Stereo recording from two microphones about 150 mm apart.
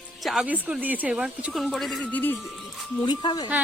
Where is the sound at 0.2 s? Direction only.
Centre (ahead or behind).